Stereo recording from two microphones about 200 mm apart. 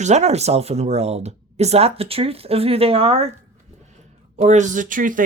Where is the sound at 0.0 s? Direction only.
35° right (ahead or behind).